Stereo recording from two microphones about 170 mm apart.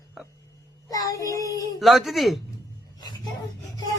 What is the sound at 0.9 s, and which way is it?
Child singing, 20° left (ahead or behind).